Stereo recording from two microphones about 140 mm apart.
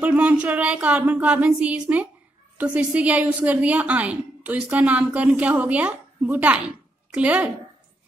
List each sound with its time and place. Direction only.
0.0 s a woman's voice: 10° right (ahead or behind)